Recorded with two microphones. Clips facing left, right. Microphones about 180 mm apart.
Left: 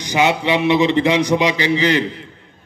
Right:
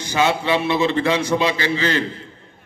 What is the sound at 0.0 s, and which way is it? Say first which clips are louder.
A man's voice: left 2 dB; 15° left (ahead or behind).